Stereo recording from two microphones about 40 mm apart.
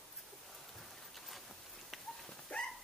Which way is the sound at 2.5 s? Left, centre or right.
Left.